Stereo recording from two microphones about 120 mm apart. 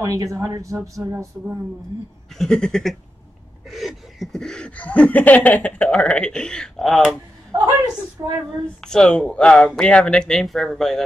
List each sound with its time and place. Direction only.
0.0 s speech: 25° right (ahead or behind)
2.3 s speech: 5° left (ahead or behind)
3.6 s a sound: centre (ahead or behind)
7.5 s chuckle: 35° right (ahead or behind)
8.2 s speech: 30° right (ahead or behind)
8.8 s a sound: 5° left (ahead or behind)
9.7 s speech: 10° left (ahead or behind)